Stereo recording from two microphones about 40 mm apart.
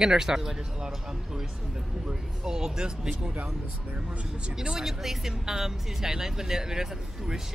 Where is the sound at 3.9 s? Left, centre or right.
Right.